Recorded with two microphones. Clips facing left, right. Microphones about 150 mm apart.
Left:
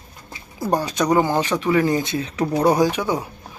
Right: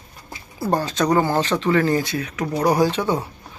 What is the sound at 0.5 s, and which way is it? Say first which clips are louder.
Speech: even; 15° left (ahead or behind).